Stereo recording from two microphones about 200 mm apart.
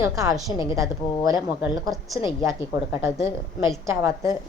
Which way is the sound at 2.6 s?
10° right (ahead or behind).